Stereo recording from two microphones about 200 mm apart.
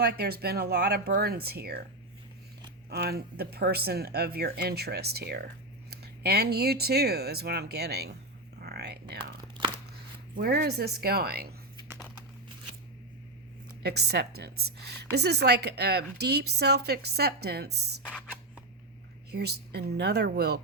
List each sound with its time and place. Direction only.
0.0 s speech: 50° right (ahead or behind)
2.9 s speech: 50° right (ahead or behind)
8.6 s whispering: 55° right (ahead or behind)
9.6 s a sound: 25° right (ahead or behind)
10.3 s speech: 50° right (ahead or behind)
13.8 s a woman's voice: 55° right (ahead or behind)
19.3 s a woman's voice: 55° right (ahead or behind)